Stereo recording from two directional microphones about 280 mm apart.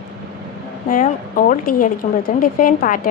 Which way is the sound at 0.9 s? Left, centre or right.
Left.